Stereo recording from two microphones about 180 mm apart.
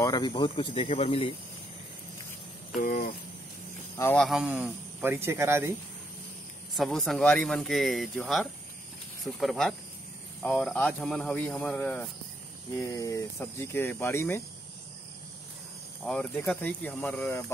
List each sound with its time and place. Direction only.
0.0 s speech: 25° left (ahead or behind)
2.8 s speech: 55° left (ahead or behind)
3.9 s speech: 15° left (ahead or behind)
4.2 s speech: 5° right (ahead or behind)
6.7 s speech: centre (ahead or behind)
12.9 s speech: 15° left (ahead or behind)
16.1 s speech: 5° left (ahead or behind)